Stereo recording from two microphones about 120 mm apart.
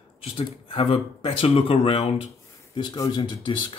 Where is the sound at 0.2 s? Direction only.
50° left (ahead or behind).